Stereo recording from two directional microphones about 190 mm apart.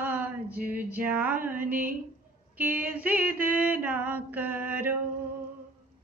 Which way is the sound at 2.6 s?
10° right (ahead or behind).